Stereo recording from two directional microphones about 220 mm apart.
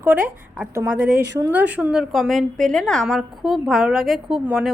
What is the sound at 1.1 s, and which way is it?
Speech, 45° right (ahead or behind).